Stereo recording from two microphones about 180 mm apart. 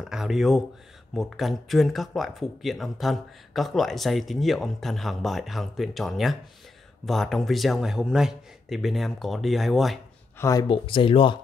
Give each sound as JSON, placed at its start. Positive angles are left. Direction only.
{"t": 0.0, "sound": "speech", "side_deg": 0}
{"t": 10.4, "sound": "speech", "side_deg": 20}